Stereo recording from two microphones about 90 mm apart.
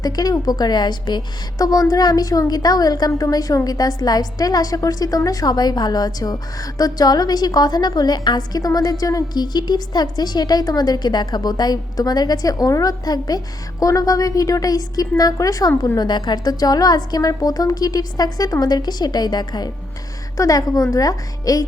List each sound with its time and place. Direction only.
0.0 s a woman's voice: 45° left (ahead or behind)
16.0 s a woman's voice: 55° left (ahead or behind)
20.3 s a woman's voice: 40° left (ahead or behind)